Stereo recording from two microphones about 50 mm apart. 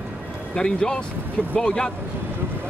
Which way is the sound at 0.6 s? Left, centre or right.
Centre.